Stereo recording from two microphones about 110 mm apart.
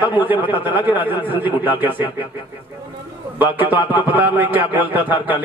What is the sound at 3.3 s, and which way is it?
A man's voice, 15° right (ahead or behind).